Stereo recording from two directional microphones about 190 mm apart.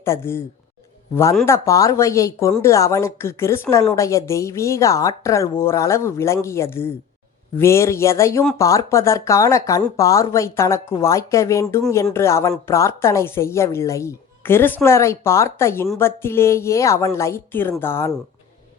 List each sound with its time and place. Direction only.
0.0 s a woman's voice: 15° left (ahead or behind)